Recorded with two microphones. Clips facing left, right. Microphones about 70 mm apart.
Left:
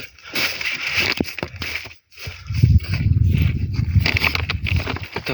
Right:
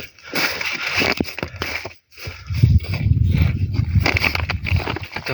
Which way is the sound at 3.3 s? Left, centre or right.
Right.